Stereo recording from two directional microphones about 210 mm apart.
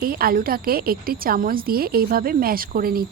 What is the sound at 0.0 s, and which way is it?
A woman's voice, 45° right (ahead or behind).